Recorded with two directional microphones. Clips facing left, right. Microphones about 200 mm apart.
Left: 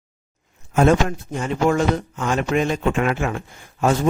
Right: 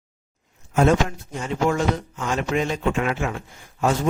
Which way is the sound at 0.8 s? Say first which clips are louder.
Left 2 dB; 55° left (ahead or behind).